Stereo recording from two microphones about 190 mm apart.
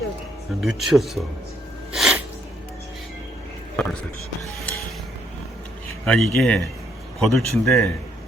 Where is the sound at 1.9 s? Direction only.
5° right (ahead or behind).